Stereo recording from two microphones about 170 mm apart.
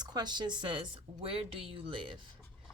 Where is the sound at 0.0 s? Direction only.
25° right (ahead or behind).